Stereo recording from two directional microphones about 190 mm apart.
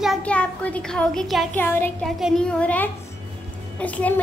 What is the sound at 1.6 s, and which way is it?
Speech, 10° left (ahead or behind).